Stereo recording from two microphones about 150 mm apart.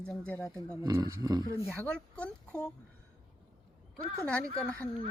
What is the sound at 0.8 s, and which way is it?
Speech, 25° right (ahead or behind).